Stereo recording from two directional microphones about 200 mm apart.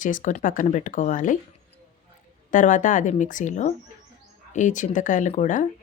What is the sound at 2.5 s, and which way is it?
Speech, 40° left (ahead or behind).